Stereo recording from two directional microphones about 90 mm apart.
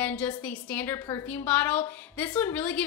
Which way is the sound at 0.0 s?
15° left (ahead or behind).